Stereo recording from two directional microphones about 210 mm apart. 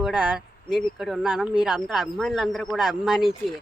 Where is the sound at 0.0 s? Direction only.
5° right (ahead or behind).